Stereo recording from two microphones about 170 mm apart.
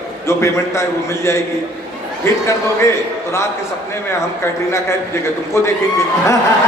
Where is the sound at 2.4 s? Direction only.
15° left (ahead or behind).